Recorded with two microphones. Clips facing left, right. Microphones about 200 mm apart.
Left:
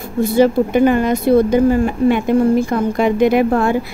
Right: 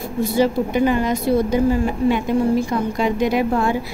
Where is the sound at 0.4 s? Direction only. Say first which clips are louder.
Left 5 dB; 55° left (ahead or behind).